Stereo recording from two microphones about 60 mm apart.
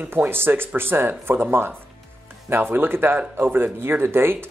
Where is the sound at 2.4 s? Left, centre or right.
Right.